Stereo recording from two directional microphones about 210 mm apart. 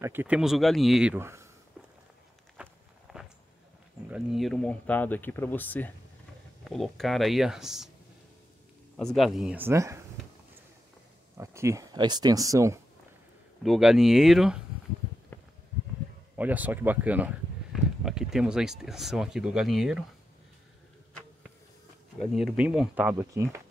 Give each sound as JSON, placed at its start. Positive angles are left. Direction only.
{"t": 0.0, "sound": "speech", "side_deg": -10}
{"t": 2.5, "sound": "walk", "side_deg": -5}
{"t": 4.1, "sound": "speech", "side_deg": 0}
{"t": 8.9, "sound": "speech", "side_deg": 0}
{"t": 11.3, "sound": "speech", "side_deg": -15}
{"t": 13.7, "sound": "speech", "side_deg": 0}
{"t": 16.3, "sound": "speech", "side_deg": -10}
{"t": 22.2, "sound": "speech", "side_deg": 0}